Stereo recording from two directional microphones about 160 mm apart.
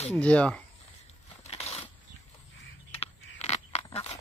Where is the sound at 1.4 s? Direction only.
40° left (ahead or behind).